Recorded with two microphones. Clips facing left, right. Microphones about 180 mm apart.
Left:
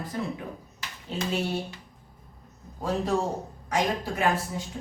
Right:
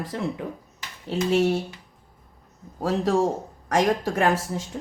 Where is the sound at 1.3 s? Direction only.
85° right.